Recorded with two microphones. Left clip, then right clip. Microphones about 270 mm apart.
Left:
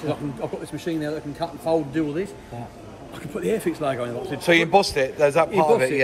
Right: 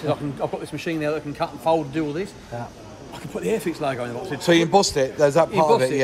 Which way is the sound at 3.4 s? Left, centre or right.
Centre.